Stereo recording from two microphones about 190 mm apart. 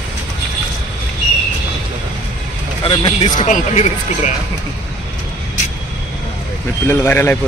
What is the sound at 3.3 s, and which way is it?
Speech, 40° left (ahead or behind).